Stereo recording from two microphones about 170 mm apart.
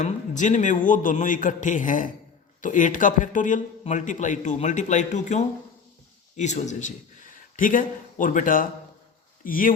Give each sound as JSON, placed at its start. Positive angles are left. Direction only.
{"t": 0.0, "sound": "a man's voice", "side_deg": 45}